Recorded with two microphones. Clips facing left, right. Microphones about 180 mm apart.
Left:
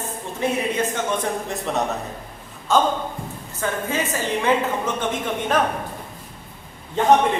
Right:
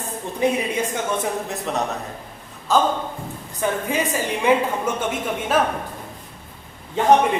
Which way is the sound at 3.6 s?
15° right (ahead or behind).